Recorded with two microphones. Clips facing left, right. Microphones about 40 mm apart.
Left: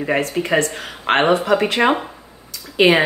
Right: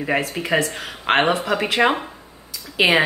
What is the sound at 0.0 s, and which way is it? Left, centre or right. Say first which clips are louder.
Speech: left 3 dB; centre.